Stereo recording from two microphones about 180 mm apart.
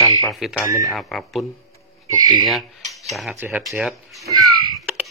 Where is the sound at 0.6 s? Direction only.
20° right (ahead or behind).